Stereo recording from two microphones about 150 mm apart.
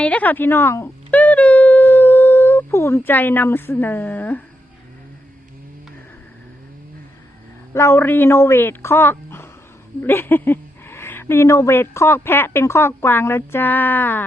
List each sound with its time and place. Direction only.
0.0 s speech: 10° left (ahead or behind)
7.7 s speech: 15° left (ahead or behind)